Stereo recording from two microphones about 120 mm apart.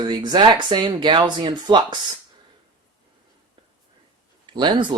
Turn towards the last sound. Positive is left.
turn(degrees=-40)  # may be behind; listen again after turning